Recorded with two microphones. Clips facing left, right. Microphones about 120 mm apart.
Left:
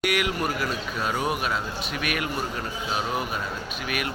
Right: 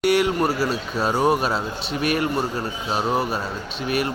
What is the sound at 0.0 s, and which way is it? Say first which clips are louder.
Speech: right 7 dB; 30° right (ahead or behind).